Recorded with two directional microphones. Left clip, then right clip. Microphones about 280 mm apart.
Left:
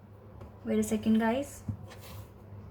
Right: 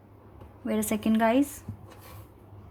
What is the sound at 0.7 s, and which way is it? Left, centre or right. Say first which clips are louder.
Speech: right 2 dB; right.